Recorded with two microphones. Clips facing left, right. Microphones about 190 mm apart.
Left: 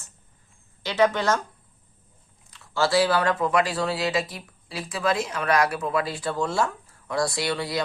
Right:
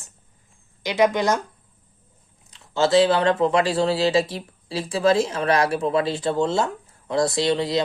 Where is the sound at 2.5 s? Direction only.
20° right (ahead or behind).